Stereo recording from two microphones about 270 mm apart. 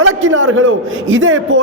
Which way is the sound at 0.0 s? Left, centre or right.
Right.